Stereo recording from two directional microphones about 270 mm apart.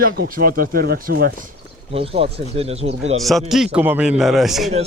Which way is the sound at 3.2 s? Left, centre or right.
Centre.